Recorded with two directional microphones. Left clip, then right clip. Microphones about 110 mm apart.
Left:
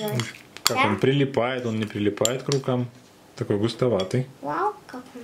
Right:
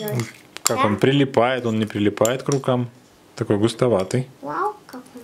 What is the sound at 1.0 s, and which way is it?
Speech, 40° right (ahead or behind).